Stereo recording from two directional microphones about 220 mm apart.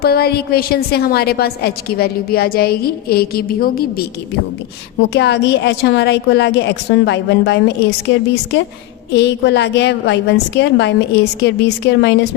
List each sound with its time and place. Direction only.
0.0 s a woman's voice: 45° left (ahead or behind)
5.1 s a woman's voice: 50° left (ahead or behind)